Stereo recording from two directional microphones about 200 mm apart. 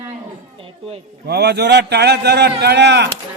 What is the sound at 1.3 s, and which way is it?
A man's voice, 55° right (ahead or behind).